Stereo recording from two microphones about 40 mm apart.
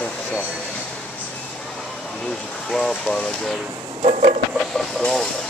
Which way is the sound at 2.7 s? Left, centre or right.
Centre.